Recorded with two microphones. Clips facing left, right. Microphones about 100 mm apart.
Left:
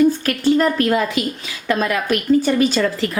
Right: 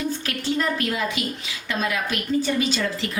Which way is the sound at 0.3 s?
45° left (ahead or behind).